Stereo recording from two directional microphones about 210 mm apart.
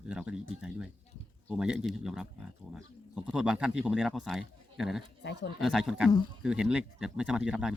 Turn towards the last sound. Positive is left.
turn(degrees=-5)  # may be behind; listen again after turning